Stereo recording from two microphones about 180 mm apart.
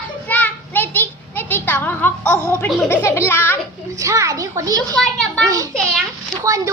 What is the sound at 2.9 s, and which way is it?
Speech, 15° left (ahead or behind).